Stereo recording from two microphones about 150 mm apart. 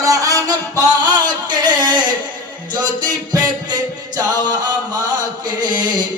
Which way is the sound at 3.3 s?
25° right (ahead or behind).